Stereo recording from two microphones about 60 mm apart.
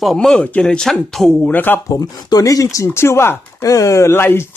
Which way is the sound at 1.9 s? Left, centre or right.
Left.